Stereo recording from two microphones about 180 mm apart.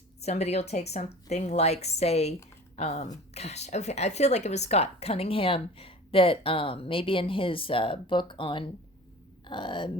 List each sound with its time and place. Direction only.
0.2 s a woman's voice: 35° left (ahead or behind)